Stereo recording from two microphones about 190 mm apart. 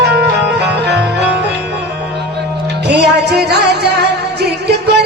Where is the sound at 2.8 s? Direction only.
60° right (ahead or behind).